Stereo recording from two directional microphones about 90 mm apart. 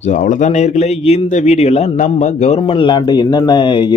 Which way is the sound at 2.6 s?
90° left.